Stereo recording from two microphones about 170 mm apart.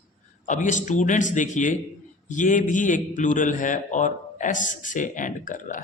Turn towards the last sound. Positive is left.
turn(degrees=50)  # may be behind; listen again after turning